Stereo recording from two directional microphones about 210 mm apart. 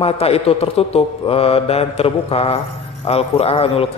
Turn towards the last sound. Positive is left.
turn(degrees=30)  # may be behind; listen again after turning